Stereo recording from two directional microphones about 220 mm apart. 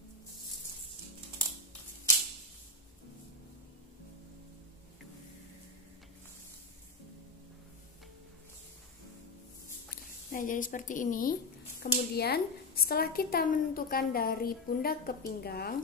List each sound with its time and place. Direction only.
10.3 s a woman's voice: 35° left (ahead or behind)